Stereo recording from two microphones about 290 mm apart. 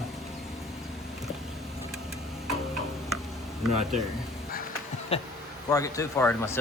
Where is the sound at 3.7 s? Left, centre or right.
Right.